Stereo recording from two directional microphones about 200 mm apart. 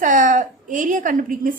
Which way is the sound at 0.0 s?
40° right (ahead or behind).